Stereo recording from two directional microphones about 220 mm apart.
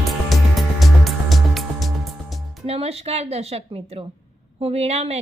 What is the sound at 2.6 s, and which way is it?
A woman's voice, 25° right (ahead or behind).